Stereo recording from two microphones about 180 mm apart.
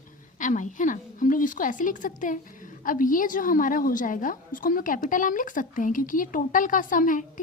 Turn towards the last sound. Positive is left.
turn(degrees=45)  # may be behind; listen again after turning